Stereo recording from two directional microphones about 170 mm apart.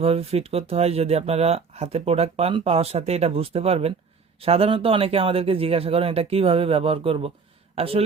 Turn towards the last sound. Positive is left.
turn(degrees=-35)  # may be behind; listen again after turning